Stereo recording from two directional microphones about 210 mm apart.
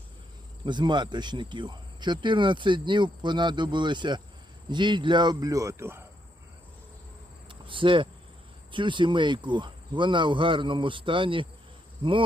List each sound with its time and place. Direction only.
0.6 s speech: 20° right (ahead or behind)
7.4 s cricket: 25° right (ahead or behind)
8.7 s speech: 20° right (ahead or behind)